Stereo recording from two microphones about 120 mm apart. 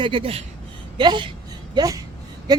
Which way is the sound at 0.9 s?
40° right (ahead or behind).